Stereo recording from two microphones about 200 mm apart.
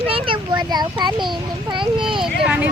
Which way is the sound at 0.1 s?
25° right (ahead or behind).